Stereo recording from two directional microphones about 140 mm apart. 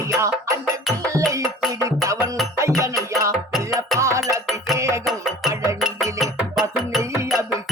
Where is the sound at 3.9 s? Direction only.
20° right (ahead or behind).